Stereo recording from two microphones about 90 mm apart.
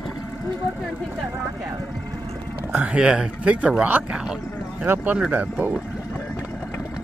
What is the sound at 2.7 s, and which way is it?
Speech, 15° right (ahead or behind).